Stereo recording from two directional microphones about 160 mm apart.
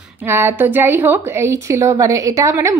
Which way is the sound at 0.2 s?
15° right (ahead or behind).